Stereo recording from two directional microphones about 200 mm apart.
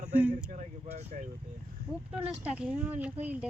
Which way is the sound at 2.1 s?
5° right (ahead or behind).